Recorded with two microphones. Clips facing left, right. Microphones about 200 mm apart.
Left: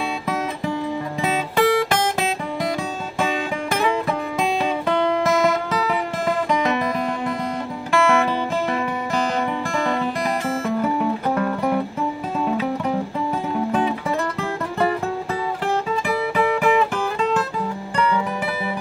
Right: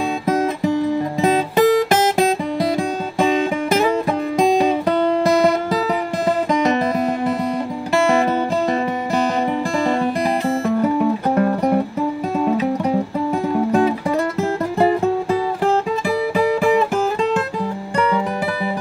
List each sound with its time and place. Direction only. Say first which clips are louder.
0.3 s guitar: right 8 dB; 40° right (ahead or behind)
4.4 s music: right 9 dB; 40° right (ahead or behind)
11.3 s music: right 4 dB; 35° right (ahead or behind)
15.6 s music: right 4 dB; 35° right (ahead or behind)